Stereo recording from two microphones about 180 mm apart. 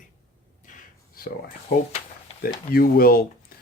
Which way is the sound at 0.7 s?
50° left (ahead or behind).